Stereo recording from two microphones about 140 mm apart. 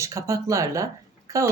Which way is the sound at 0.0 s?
20° right (ahead or behind).